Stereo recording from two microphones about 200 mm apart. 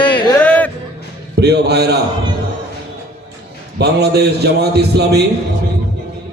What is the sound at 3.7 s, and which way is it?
A man's voice, 55° right (ahead or behind).